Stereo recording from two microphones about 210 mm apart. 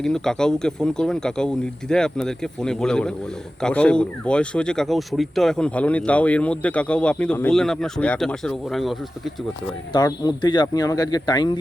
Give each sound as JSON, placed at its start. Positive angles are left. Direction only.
{"t": 0.0, "sound": "speech", "side_deg": 5}
{"t": 9.9, "sound": "speech", "side_deg": 20}